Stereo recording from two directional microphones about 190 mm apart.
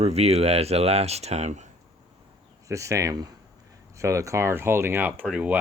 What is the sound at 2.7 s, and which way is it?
Speech, 15° right (ahead or behind).